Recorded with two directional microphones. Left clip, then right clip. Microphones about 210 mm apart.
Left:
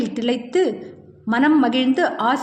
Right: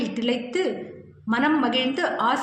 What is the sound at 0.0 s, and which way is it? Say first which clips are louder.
A woman's voice: left 3 dB; 50° left (ahead or behind).